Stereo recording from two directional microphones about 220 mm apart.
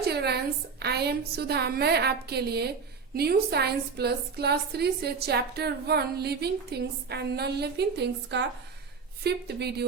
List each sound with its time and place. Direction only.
0.0 s a woman's voice: 45° right (ahead or behind)